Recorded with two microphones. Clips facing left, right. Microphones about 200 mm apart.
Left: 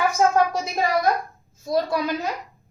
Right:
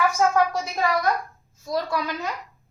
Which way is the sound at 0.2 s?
25° left (ahead or behind).